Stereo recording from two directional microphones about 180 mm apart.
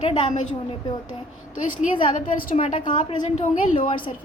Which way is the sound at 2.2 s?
45° left (ahead or behind).